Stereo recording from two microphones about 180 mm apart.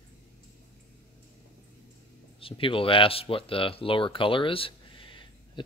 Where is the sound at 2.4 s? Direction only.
30° left (ahead or behind).